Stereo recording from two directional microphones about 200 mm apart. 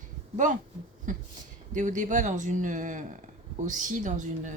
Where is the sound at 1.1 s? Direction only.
40° right (ahead or behind).